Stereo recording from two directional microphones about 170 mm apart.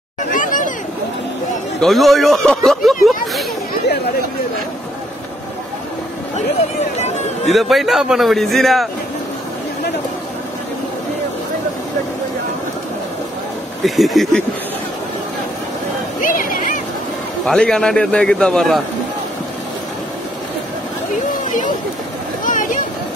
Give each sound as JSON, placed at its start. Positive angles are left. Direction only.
{"t": 0.3, "sound": "hubbub", "side_deg": 50}
{"t": 1.8, "sound": "a man's voice", "side_deg": 0}
{"t": 7.4, "sound": "a man's voice", "side_deg": 0}
{"t": 13.8, "sound": "a man's voice", "side_deg": 0}
{"t": 16.2, "sound": "a sound", "side_deg": 55}
{"t": 17.5, "sound": "a man's voice", "side_deg": 5}